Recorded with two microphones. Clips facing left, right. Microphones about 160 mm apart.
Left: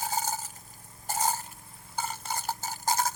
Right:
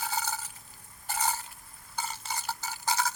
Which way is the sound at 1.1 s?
45° left (ahead or behind).